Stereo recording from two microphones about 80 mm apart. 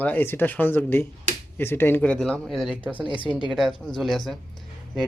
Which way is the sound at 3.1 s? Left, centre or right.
Left.